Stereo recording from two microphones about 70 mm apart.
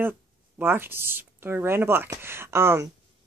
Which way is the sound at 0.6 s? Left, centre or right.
Right.